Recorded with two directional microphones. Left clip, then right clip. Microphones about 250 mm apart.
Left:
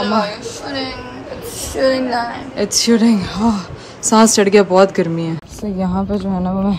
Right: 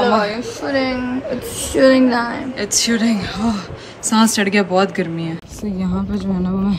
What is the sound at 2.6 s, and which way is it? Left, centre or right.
A woman's voice, centre.